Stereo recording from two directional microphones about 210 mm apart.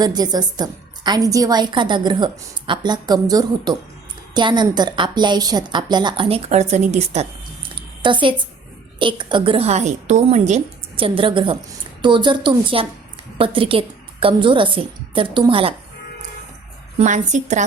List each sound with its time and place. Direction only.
0.0 s a woman's voice: 20° right (ahead or behind)
7.8 s a sound: 25° right (ahead or behind)
9.0 s a woman's voice: 25° right (ahead or behind)
17.0 s a woman's voice: 35° right (ahead or behind)